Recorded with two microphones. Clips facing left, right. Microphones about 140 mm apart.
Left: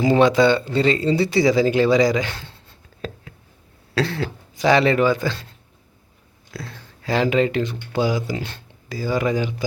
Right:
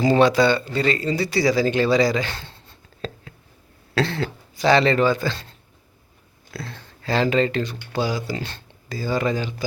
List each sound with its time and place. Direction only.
0.0 s speech: 15° left (ahead or behind)
3.0 s a sound: 10° left (ahead or behind)
4.0 s speech: 10° left (ahead or behind)
6.5 s speech: 10° left (ahead or behind)